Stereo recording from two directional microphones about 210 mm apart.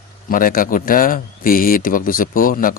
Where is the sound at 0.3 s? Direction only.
40° left (ahead or behind).